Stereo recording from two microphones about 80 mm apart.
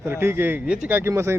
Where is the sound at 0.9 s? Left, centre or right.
Right.